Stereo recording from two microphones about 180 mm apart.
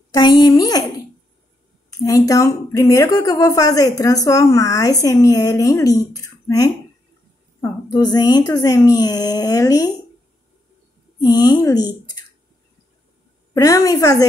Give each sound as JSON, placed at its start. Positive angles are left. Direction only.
{"t": 0.1, "sound": "a woman's voice", "side_deg": 25}
{"t": 7.9, "sound": "a woman's voice", "side_deg": 20}
{"t": 11.1, "sound": "a woman's voice", "side_deg": 20}
{"t": 13.5, "sound": "a woman's voice", "side_deg": 20}